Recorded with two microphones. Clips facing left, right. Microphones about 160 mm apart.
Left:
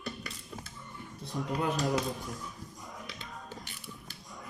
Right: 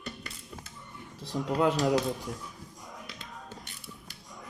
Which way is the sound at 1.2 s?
75° right (ahead or behind).